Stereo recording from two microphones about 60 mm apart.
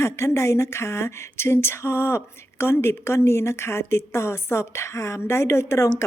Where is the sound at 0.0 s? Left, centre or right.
Left.